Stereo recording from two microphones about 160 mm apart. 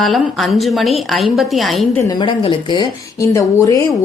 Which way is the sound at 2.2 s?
30° left (ahead or behind).